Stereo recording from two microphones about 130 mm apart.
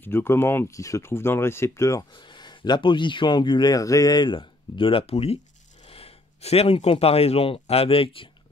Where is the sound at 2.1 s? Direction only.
35° left (ahead or behind).